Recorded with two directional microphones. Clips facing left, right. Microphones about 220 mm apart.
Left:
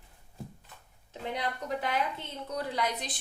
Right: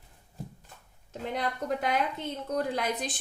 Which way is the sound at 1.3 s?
45° right (ahead or behind).